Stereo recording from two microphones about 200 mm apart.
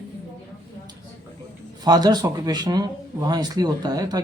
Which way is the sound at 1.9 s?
20° right (ahead or behind).